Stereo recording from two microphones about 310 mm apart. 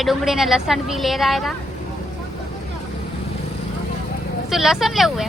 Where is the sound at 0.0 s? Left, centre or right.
Centre.